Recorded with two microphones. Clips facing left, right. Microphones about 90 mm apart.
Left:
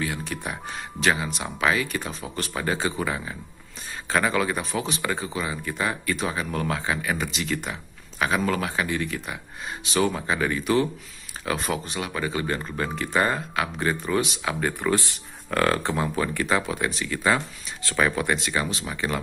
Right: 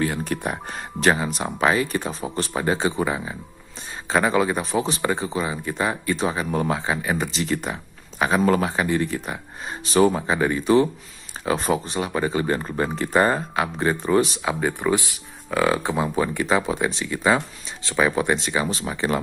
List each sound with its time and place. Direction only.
0.0 s speech: 40° right (ahead or behind)
14.4 s speech: 15° right (ahead or behind)
18.7 s speech: 35° right (ahead or behind)